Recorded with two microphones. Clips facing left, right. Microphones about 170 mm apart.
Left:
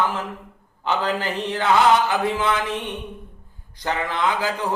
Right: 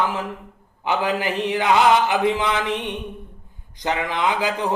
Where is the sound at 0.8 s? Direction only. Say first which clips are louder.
Right 1 dB; 15° right (ahead or behind).